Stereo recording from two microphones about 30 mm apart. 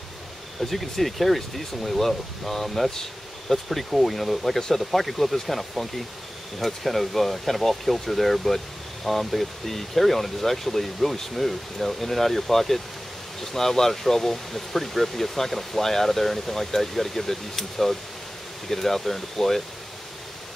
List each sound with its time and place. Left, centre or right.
0.6 s speech: centre
4.6 s speech: centre
4.9 s speech: centre